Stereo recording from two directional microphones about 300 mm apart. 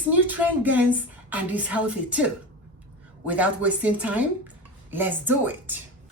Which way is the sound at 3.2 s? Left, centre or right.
Centre.